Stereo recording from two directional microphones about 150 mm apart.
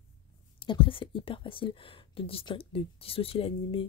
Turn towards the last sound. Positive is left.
turn(degrees=40)  # may be behind; listen again after turning